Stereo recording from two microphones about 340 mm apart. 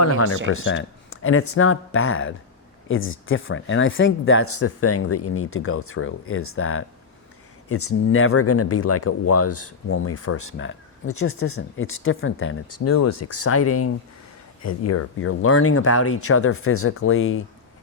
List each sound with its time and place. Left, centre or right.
0.0 s speech: left